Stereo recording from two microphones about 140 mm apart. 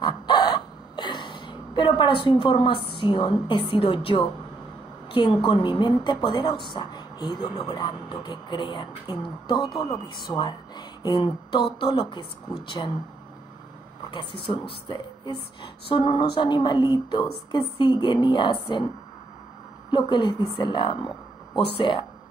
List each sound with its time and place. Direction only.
0.0 s hiccup: 30° left (ahead or behind)
3.0 s a woman's voice: 35° left (ahead or behind)
14.1 s a woman's voice: 35° left (ahead or behind)
19.9 s a woman's voice: 30° left (ahead or behind)